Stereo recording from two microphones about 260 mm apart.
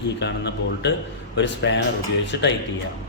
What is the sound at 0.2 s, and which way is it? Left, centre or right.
Speech, left.